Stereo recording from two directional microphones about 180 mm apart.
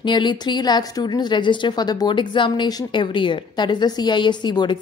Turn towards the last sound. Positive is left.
turn(degrees=25)  # may be behind; listen again after turning